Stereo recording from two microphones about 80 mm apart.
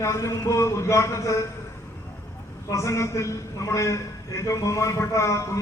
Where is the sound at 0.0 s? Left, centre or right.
Left.